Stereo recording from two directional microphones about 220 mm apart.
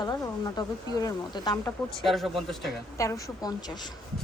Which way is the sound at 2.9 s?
15° left (ahead or behind).